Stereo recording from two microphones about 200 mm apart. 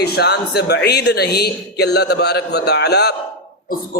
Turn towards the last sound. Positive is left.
turn(degrees=55)  # may be behind; listen again after turning